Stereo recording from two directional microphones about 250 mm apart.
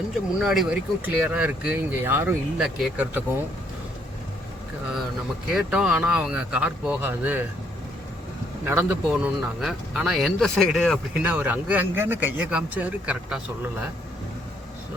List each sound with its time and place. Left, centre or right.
0.3 s a man's voice: centre
5.5 s a man's voice: centre
8.6 s a man's voice: centre